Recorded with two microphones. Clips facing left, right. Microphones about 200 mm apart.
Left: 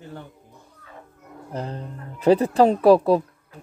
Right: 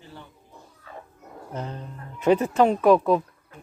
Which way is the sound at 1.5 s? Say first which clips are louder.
Left 3 dB; 35° left (ahead or behind).